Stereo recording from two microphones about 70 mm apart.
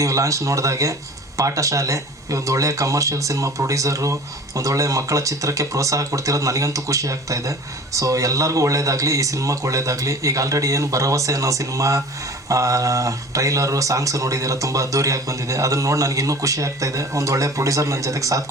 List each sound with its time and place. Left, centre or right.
0.0 s speech: right